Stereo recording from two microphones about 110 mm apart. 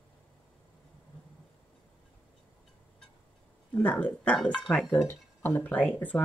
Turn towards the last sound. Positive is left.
turn(degrees=15)  # may be behind; listen again after turning